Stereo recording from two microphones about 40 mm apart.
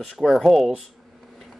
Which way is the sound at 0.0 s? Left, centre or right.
Centre.